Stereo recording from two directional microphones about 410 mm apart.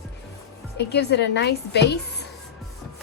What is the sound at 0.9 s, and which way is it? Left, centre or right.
A woman's voice, left.